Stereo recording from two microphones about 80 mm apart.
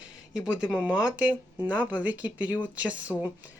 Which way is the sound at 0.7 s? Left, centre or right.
Centre.